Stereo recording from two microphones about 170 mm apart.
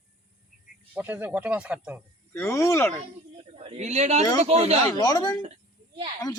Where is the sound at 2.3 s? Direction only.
15° left (ahead or behind).